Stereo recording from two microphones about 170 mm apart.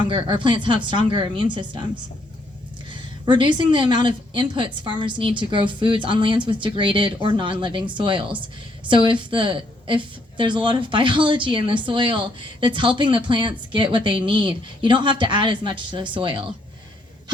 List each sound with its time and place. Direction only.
0.0 s a woman's voice: 30° right (ahead or behind)
2.9 s a woman's voice: 30° right (ahead or behind)